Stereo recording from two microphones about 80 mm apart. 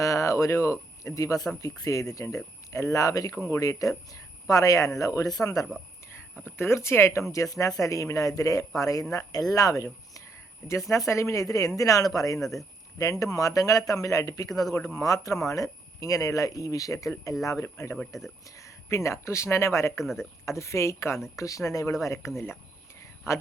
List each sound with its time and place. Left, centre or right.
0.0 s speech: left
6.4 s speech: left
23.0 s a sound: left